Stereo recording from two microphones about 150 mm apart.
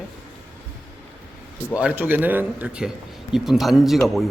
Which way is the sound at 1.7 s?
10° right (ahead or behind).